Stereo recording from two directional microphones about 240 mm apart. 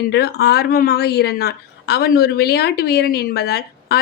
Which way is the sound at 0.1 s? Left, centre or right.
Left.